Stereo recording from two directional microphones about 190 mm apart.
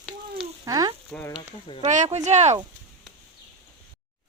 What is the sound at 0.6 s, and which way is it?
Speech, 20° right (ahead or behind).